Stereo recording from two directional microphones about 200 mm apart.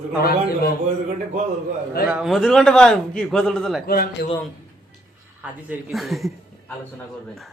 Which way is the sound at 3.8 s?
45° left (ahead or behind).